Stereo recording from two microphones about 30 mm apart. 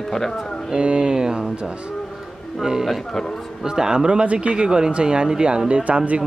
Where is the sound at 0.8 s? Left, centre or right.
Right.